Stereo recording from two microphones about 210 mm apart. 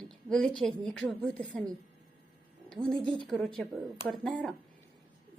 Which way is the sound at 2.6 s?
5° left (ahead or behind).